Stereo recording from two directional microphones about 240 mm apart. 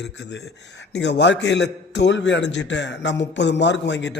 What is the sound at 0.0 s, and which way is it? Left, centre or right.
A man's voice, left.